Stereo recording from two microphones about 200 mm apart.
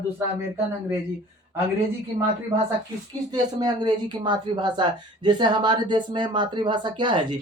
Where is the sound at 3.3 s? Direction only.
20° right (ahead or behind).